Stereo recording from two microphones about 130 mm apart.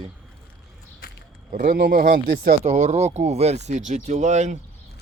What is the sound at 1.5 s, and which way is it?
Speech, 90° right.